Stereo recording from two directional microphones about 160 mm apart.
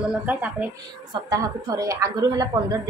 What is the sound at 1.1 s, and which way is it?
A woman's voice, 25° right (ahead or behind).